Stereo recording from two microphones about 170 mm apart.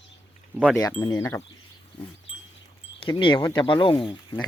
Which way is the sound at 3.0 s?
30° left (ahead or behind).